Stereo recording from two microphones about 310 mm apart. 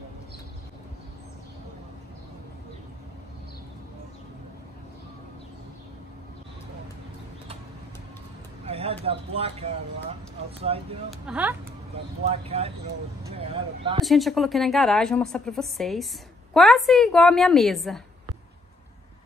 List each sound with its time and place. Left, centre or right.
8.6 s a sound: centre
10.7 s speech: centre
11.1 s a woman's voice: centre
12.3 s speech: centre
14.0 s a woman's voice: centre